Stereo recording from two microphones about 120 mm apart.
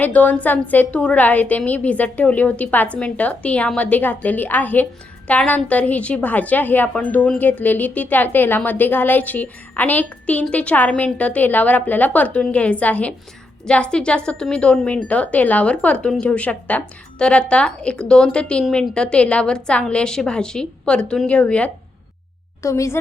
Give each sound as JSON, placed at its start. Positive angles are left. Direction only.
{"t": 0.0, "sound": "a woman's voice", "side_deg": 15}
{"t": 22.6, "sound": "a woman's voice", "side_deg": 25}